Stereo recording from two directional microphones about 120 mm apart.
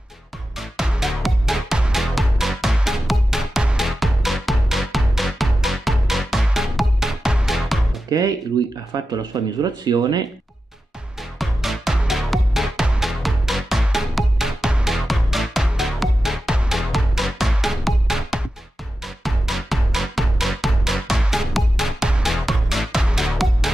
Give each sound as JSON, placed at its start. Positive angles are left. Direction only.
{"t": 0.6, "sound": "music", "side_deg": -5}
{"t": 8.1, "sound": "speech", "side_deg": -30}
{"t": 11.3, "sound": "music", "side_deg": 0}